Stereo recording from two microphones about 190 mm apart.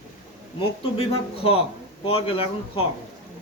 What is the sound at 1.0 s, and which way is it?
A man's voice, 30° left (ahead or behind).